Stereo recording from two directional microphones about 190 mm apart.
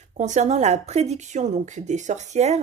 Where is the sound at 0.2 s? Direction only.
40° right (ahead or behind).